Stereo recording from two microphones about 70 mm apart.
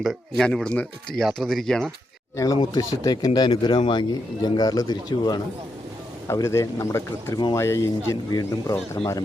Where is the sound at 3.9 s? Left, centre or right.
Left.